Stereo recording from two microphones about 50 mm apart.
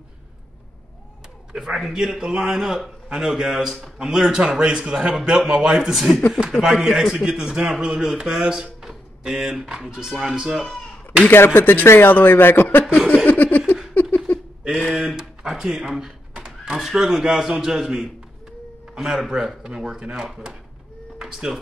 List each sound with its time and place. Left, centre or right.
1.5 s speech: centre
11.3 s speech: left
13.2 s a sound: left
14.8 s a sound: centre
15.0 s speech: centre
16.3 s neigh: centre
16.8 s speech: centre